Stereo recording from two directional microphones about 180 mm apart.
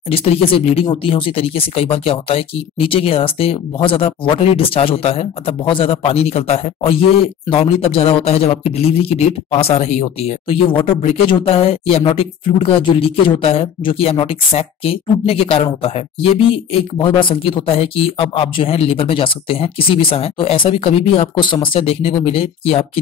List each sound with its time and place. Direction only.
0.1 s speech: 35° left (ahead or behind)